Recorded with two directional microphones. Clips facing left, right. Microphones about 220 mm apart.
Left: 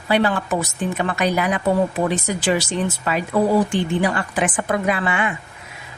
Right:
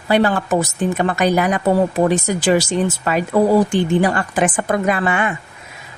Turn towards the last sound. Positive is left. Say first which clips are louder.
# right 3 dB
turn(degrees=-45)  # may be behind; listen again after turning